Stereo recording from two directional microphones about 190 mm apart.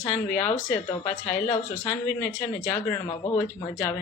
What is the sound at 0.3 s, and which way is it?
Speech, 15° left (ahead or behind).